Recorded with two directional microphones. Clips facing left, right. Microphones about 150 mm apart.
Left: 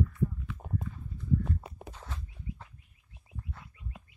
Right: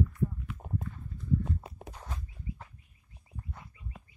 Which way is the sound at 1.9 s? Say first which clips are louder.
Right 1 dB; 15° right (ahead or behind).